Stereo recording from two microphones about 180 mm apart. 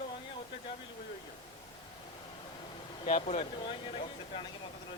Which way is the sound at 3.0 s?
40° left (ahead or behind).